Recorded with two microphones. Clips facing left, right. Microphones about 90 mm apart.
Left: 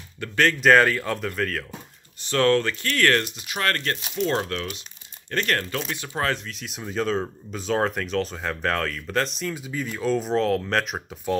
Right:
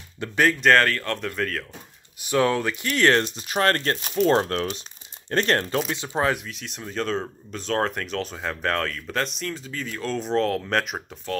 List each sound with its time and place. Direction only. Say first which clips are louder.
0.2 s speech: right 2 dB; 20° right (ahead or behind)
0.6 s speech: left 4 dB; 5° left (ahead or behind)
2.2 s speech: left 1 dB; 10° right (ahead or behind); by 5.8 s 30° right (ahead or behind)
5.9 s speech: right 3 dB; 20° right (ahead or behind)
6.4 s speech: left 1 dB; centre (ahead or behind)